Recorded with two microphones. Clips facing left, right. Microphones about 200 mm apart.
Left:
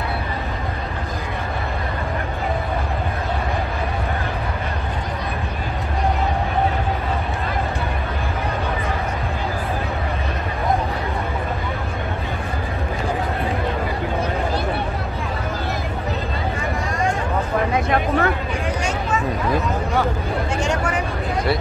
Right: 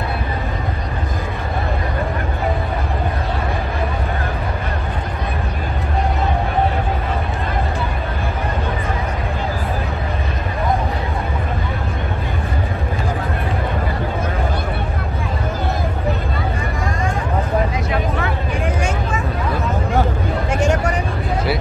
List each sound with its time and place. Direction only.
17.7 s vehicle: 55° left (ahead or behind)